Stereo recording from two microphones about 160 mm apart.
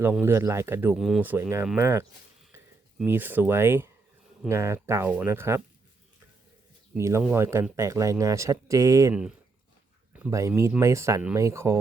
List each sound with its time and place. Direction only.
0.0 s speech: 10° right (ahead or behind)
0.9 s speech: centre (ahead or behind)
1.2 s speech: 15° right (ahead or behind)
6.9 s speech: 15° right (ahead or behind)